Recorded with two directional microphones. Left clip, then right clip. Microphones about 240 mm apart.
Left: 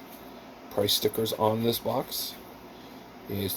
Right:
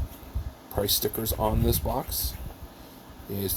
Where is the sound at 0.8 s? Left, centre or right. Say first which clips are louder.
Left 2 dB; right.